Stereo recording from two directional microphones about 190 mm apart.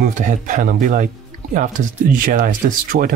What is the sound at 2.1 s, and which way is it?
Speech, 45° right (ahead or behind).